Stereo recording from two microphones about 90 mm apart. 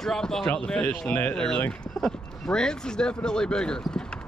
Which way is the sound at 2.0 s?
5° left (ahead or behind).